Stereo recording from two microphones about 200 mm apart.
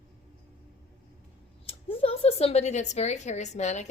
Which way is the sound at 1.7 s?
30° left (ahead or behind).